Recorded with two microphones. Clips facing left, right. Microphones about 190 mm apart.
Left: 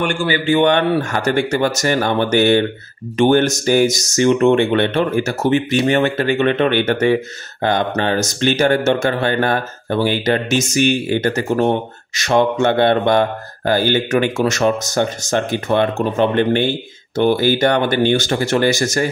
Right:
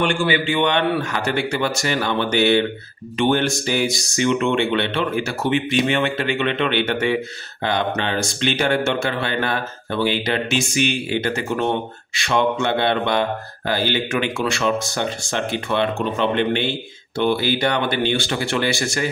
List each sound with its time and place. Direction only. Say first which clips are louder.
0.0 s speech: left 1 dB; 45° left (ahead or behind)